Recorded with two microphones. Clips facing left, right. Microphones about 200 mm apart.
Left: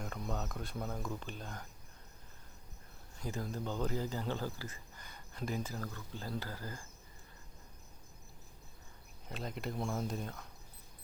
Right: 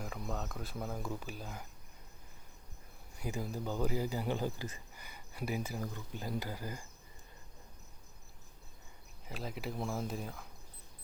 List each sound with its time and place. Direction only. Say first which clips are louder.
0.0 s speech: even; centre (ahead or behind)
3.2 s speech: right 1 dB; 10° right (ahead or behind)
9.2 s speech: even; 5° right (ahead or behind)